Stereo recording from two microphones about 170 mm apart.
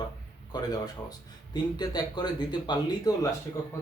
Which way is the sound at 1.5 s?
25° left (ahead or behind).